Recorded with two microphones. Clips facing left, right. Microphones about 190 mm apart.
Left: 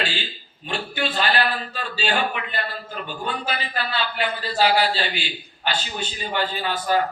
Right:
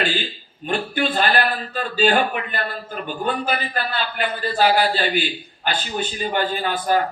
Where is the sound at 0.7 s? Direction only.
50° right (ahead or behind).